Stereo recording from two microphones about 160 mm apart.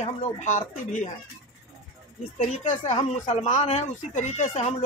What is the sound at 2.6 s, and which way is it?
Speech, 50° left (ahead or behind).